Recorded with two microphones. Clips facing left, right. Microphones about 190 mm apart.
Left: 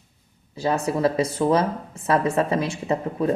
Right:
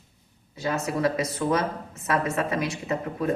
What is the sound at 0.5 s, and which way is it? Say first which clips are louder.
A woman's voice: left 4 dB; 30° left (ahead or behind).